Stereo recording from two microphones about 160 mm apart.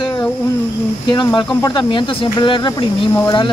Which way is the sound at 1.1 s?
30° left (ahead or behind).